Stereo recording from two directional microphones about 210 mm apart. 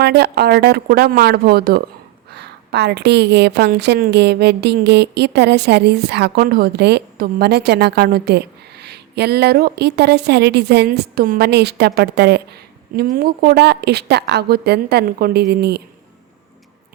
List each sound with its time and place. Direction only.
0.0 s a woman's voice: 50° right (ahead or behind)